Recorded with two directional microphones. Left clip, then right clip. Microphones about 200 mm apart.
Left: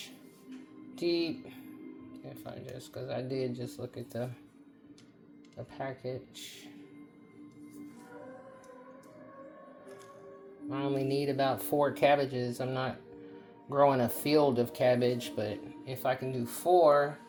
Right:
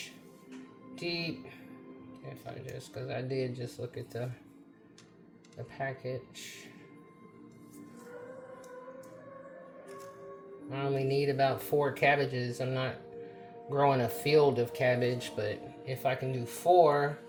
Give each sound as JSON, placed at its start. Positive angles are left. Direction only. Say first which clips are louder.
{"t": 0.9, "sound": "speech", "louder": "left 4 dB", "side_deg": 40}
{"t": 5.7, "sound": "speech", "louder": "right 2 dB", "side_deg": 35}
{"t": 10.7, "sound": "speech", "louder": "even", "side_deg": 40}